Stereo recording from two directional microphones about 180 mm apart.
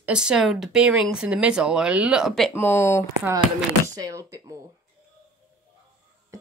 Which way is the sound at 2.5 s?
10° left (ahead or behind).